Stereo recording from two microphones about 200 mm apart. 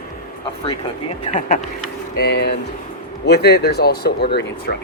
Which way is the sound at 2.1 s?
55° left (ahead or behind).